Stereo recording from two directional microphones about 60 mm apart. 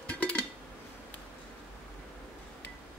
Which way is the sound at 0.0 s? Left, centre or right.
Centre.